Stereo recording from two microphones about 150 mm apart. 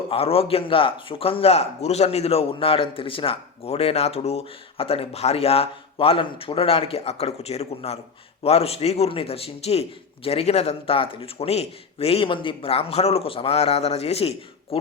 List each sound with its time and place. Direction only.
0.1 s a man's voice: 40° left (ahead or behind)